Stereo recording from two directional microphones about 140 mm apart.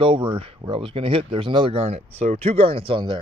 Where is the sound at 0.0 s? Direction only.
35° right (ahead or behind).